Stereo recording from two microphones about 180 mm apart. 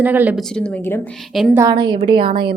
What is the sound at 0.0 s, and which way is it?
Speech, 10° right (ahead or behind).